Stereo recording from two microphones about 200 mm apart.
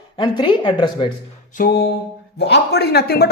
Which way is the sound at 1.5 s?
50° left (ahead or behind).